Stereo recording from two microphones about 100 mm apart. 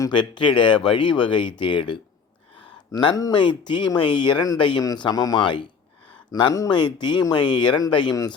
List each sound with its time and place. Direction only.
0.1 s speech: 50° left (ahead or behind)
6.3 s a man's voice: 35° left (ahead or behind)
6.7 s speech: 50° left (ahead or behind)
8.1 s a man's voice: 35° left (ahead or behind)